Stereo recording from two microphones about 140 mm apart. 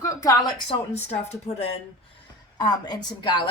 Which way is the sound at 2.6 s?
30° left (ahead or behind).